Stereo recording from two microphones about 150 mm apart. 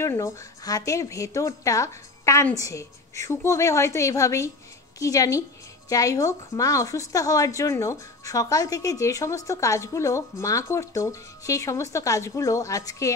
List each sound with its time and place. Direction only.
0.0 s a woman's voice: 20° left (ahead or behind)